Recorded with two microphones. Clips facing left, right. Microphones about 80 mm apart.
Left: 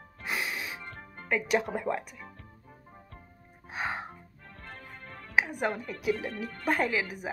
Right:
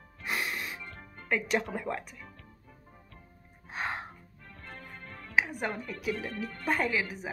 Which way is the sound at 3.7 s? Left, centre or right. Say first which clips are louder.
Left 1 dB; centre.